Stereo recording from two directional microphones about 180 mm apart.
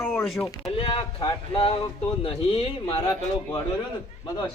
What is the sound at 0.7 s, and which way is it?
Speech, 30° left (ahead or behind).